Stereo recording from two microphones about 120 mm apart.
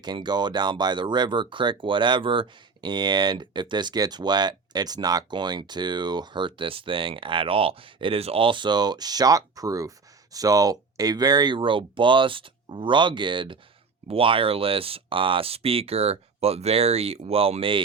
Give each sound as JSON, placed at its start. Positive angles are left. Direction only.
{"t": 0.0, "sound": "speech", "side_deg": -35}